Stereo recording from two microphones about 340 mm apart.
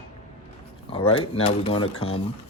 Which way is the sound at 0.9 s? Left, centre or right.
Centre.